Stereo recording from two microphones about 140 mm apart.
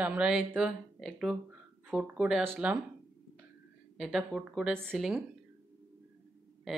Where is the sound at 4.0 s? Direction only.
5° right (ahead or behind).